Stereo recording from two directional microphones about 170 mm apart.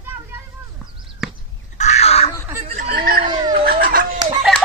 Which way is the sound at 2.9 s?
60° right (ahead or behind).